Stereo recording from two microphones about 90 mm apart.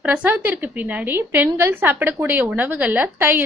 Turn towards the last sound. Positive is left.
turn(degrees=-20)  # may be behind; listen again after turning